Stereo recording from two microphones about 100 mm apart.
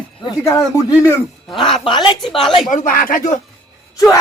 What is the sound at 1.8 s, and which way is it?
Speech, 50° left (ahead or behind).